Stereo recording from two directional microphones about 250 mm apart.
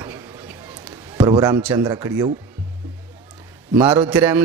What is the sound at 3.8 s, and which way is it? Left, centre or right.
Speech, centre.